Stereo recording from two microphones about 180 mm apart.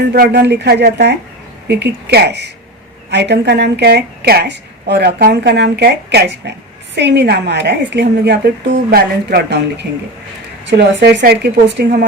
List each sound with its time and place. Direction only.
0.0 s a woman's voice: 65° right (ahead or behind)
11.2 s a woman's voice: 60° right (ahead or behind)